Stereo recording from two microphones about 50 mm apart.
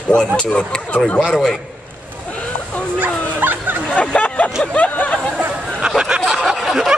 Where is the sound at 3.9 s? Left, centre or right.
Left.